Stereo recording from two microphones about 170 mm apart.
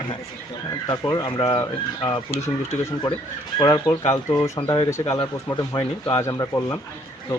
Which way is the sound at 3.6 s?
25° left (ahead or behind).